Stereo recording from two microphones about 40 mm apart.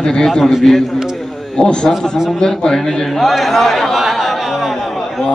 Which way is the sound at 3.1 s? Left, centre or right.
Centre.